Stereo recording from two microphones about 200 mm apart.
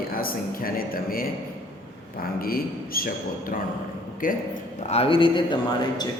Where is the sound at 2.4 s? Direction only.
45° left (ahead or behind).